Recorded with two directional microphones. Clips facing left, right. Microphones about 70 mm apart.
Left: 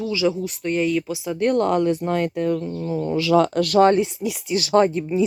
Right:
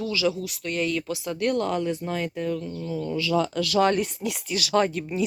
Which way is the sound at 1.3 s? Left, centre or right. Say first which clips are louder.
Left 6 dB; left.